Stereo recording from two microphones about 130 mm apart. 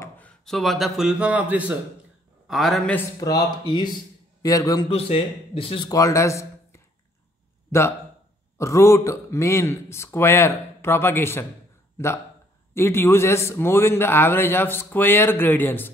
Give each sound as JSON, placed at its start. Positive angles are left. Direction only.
{"t": 0.0, "sound": "speech", "side_deg": 10}
{"t": 2.4, "sound": "a man's voice", "side_deg": 0}
{"t": 3.2, "sound": "a man's voice", "side_deg": 30}
{"t": 4.8, "sound": "a man's voice", "side_deg": 50}
{"t": 5.9, "sound": "a man's voice", "side_deg": 25}
{"t": 8.5, "sound": "speech", "side_deg": 20}
{"t": 12.7, "sound": "a man's voice", "side_deg": 20}